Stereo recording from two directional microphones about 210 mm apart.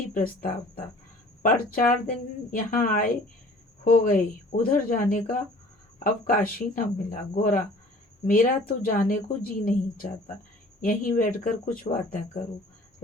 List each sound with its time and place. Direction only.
0.1 s a woman's voice: 40° left (ahead or behind)